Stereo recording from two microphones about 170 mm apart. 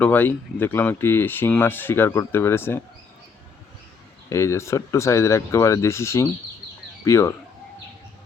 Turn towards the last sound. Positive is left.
turn(degrees=15)  # may be behind; listen again after turning